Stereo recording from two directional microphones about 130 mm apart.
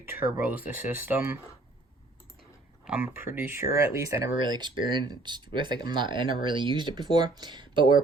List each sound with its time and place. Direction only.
0.0 s speech: 15° right (ahead or behind)
2.8 s speech: 10° right (ahead or behind)
4.4 s speech: 35° right (ahead or behind)